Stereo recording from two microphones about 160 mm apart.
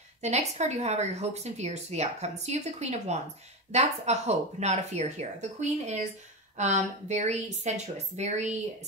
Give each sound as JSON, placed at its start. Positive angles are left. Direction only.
{"t": 0.2, "sound": "speech", "side_deg": -45}